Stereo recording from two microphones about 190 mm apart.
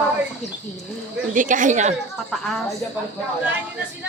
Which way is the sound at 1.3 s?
45° right (ahead or behind).